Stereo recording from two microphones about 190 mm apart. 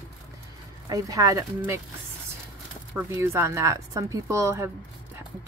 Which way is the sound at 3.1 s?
15° right (ahead or behind).